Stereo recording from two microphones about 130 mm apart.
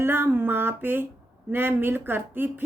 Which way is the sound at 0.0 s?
15° right (ahead or behind).